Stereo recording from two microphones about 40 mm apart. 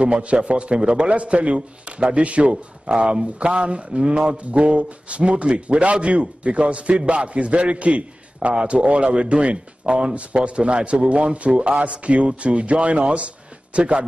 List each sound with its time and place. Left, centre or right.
0.0 s a man's voice: right